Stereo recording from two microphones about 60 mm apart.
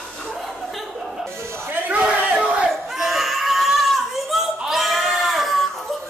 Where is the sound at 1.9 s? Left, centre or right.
Centre.